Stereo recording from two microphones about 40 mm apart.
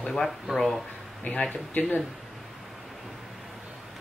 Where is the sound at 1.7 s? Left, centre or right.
Left.